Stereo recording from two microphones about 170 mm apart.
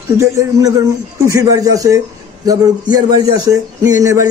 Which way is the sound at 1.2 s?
20° right (ahead or behind).